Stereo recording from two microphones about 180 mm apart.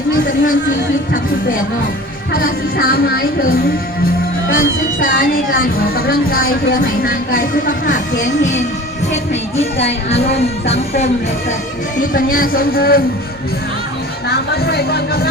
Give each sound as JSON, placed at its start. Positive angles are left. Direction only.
{"t": 2.3, "sound": "speech", "side_deg": 55}
{"t": 8.2, "sound": "music", "side_deg": 40}
{"t": 12.1, "sound": "speech", "side_deg": 50}
{"t": 14.3, "sound": "speech", "side_deg": 60}